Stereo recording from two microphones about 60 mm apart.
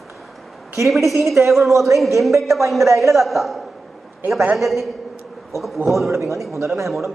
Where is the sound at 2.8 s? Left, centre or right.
Right.